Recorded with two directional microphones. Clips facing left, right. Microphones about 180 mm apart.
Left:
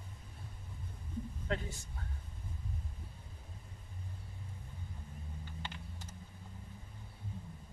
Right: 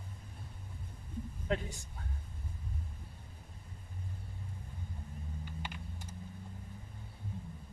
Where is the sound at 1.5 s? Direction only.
15° right (ahead or behind).